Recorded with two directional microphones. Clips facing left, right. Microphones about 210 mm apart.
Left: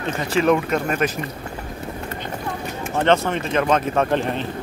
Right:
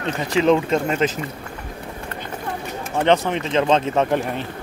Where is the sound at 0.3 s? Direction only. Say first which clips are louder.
Right 1 dB; 20° right (ahead or behind).